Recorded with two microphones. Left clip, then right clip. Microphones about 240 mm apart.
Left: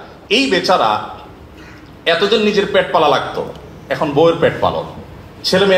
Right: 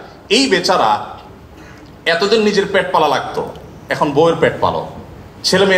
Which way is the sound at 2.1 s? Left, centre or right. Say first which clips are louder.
Even; right.